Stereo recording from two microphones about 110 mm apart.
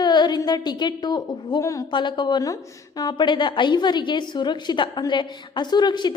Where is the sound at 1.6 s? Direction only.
30° left (ahead or behind).